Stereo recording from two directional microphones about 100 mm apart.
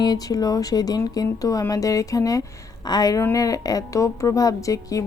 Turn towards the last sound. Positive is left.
turn(degrees=35)  # may be behind; listen again after turning